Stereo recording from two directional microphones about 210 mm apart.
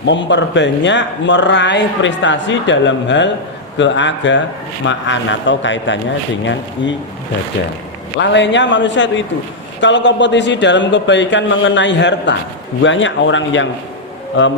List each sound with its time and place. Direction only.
0.0 s speech: 60° left (ahead or behind)
8.2 s speech: 60° left (ahead or behind)